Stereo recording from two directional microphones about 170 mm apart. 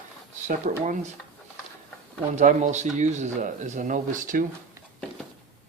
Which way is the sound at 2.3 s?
45° right (ahead or behind).